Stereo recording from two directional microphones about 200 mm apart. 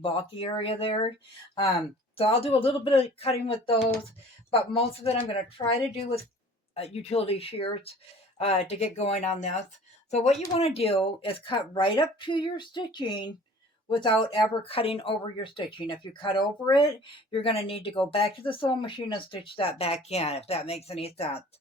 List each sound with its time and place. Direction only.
0.0 s speech: 25° left (ahead or behind)
2.1 s speech: 30° left (ahead or behind)